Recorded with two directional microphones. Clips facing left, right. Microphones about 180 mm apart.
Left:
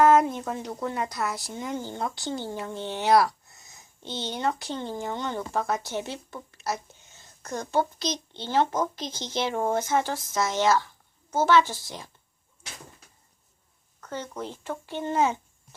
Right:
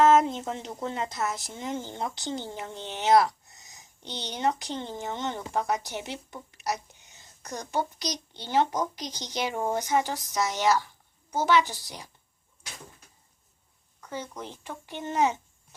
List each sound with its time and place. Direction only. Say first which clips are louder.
0.0 s a woman's voice: left 1 dB; 25° right (ahead or behind)
14.0 s a child's voice: left 3 dB; 10° right (ahead or behind)